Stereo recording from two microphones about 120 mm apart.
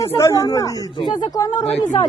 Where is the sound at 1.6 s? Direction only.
50° left (ahead or behind).